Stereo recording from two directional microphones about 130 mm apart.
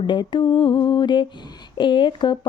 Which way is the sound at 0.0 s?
40° left (ahead or behind).